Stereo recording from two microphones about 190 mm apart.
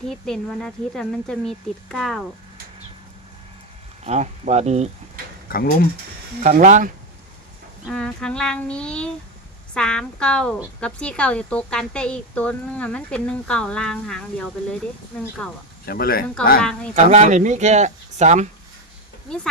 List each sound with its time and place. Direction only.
0.0 s speech: 5° left (ahead or behind)
4.0 s speech: 35° right (ahead or behind)
6.4 s speech: 45° right (ahead or behind)
7.9 s speech: 5° left (ahead or behind)
15.9 s speech: 50° left (ahead or behind)
16.6 s speech: 5° left (ahead or behind)
16.9 s speech: 35° right (ahead or behind)